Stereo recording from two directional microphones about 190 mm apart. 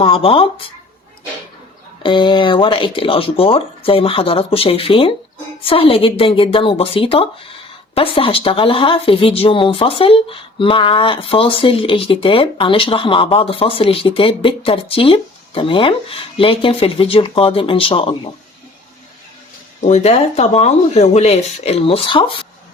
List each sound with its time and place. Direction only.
0.0 s speech: 30° left (ahead or behind)
2.0 s speech: 25° left (ahead or behind)
19.8 s speech: 35° left (ahead or behind)